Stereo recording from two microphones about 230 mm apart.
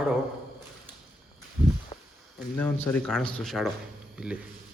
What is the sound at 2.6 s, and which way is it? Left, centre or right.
A man's voice, centre.